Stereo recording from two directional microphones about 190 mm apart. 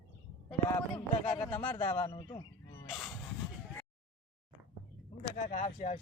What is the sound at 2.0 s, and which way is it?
Speech, 25° left (ahead or behind).